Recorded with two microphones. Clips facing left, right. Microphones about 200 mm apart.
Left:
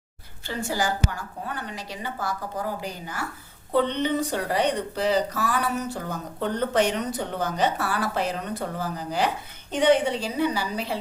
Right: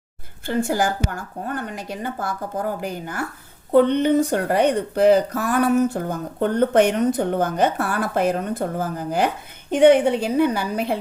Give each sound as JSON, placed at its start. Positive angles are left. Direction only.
{"t": 0.4, "sound": "speech", "side_deg": -55}